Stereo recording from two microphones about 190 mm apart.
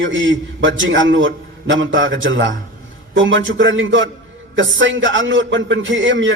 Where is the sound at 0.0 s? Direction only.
80° right.